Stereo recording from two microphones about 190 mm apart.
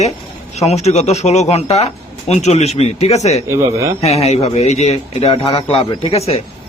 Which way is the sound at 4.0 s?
35° left (ahead or behind).